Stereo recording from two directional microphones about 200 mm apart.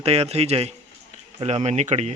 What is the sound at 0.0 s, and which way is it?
Speech, 30° right (ahead or behind).